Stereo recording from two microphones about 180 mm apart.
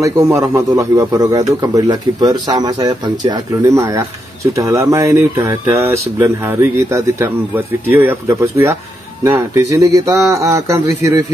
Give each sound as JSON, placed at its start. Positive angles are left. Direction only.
{"t": 0.4, "sound": "speech", "side_deg": -15}